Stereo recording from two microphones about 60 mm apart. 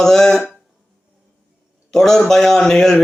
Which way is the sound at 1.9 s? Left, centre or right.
Centre.